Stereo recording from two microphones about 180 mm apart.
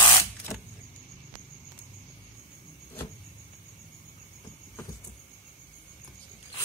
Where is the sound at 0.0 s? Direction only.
15° left (ahead or behind).